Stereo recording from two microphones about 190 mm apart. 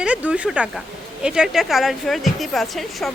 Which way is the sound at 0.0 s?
5° right (ahead or behind).